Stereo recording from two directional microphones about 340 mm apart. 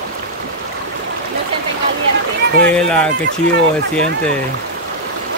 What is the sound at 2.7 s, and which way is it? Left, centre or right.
Speech, centre.